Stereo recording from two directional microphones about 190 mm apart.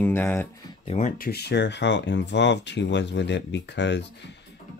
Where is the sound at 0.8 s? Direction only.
35° left (ahead or behind); by 4.0 s 65° left (ahead or behind).